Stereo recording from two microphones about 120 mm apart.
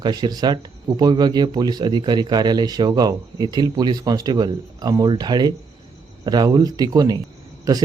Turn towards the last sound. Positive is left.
turn(degrees=-30)  # may be behind; listen again after turning